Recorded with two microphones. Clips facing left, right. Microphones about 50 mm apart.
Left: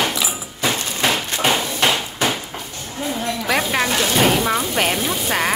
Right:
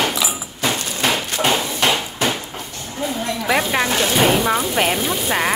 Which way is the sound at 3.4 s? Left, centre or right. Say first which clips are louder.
Right 1 dB; centre.